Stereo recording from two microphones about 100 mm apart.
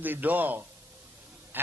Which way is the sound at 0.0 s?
15° right (ahead or behind).